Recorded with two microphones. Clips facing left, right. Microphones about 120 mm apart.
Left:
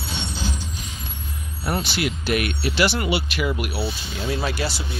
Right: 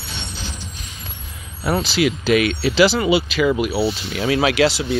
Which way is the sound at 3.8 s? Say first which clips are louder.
Right 7 dB; 90° right.